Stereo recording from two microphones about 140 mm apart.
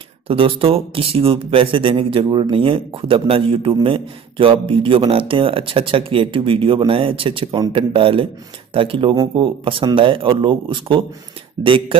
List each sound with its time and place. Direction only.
0.3 s a man's voice: 40° right (ahead or behind)